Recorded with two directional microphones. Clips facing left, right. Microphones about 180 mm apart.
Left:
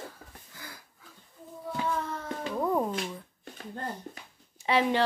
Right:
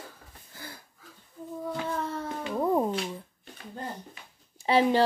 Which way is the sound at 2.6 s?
20° right (ahead or behind).